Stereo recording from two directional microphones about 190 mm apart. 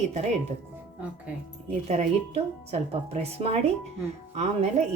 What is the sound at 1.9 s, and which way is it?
A woman's voice, 35° right (ahead or behind).